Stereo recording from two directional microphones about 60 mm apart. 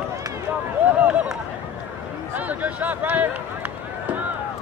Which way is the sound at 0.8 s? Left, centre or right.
Right.